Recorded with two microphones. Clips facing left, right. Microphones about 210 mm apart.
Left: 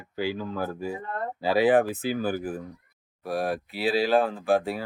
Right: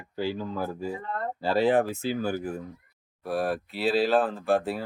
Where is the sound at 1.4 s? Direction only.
15° left (ahead or behind).